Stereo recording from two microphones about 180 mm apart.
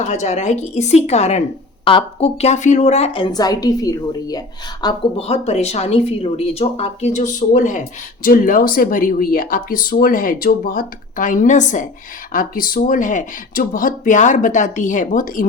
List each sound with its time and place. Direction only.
0.0 s speech: 40° left (ahead or behind); by 4.9 s 20° left (ahead or behind)
5.1 s speech: 35° left (ahead or behind); by 15.4 s 50° left (ahead or behind)